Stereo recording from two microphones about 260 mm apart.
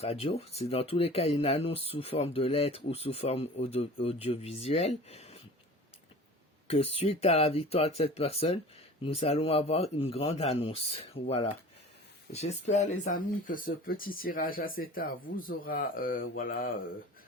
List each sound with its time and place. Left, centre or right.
0.0 s speech: left
6.7 s speech: left